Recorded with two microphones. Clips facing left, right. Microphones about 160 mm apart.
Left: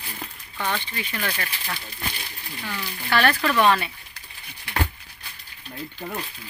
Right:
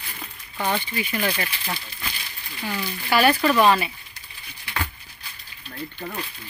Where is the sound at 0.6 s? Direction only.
15° right (ahead or behind).